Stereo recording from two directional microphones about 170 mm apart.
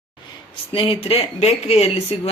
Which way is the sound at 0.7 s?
35° left (ahead or behind).